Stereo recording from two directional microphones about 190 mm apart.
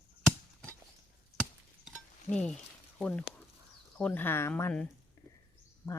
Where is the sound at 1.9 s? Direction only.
5° left (ahead or behind).